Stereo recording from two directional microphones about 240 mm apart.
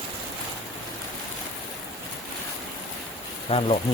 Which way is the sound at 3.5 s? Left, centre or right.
Left.